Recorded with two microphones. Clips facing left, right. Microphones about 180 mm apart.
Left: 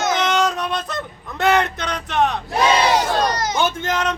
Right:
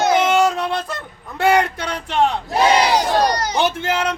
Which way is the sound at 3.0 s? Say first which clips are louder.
Right 2 dB; 35° right (ahead or behind).